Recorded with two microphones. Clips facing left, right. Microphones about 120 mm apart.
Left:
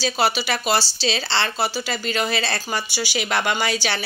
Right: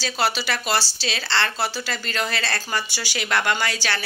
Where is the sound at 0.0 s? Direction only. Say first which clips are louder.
Left 3 dB; 15° left (ahead or behind).